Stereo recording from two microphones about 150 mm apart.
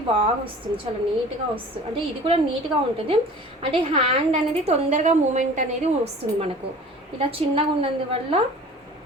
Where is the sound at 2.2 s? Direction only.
40° right (ahead or behind).